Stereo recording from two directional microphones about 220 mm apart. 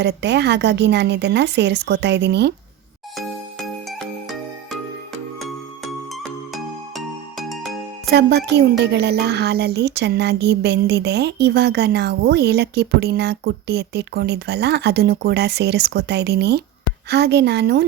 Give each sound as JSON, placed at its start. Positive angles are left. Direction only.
{"t": 0.0, "sound": "speech", "side_deg": -50}
{"t": 6.5, "sound": "music", "side_deg": 0}
{"t": 8.1, "sound": "speech", "side_deg": -50}